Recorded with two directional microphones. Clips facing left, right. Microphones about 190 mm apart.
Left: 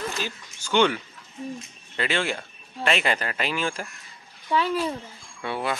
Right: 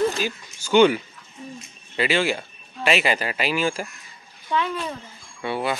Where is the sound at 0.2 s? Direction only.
10° right (ahead or behind).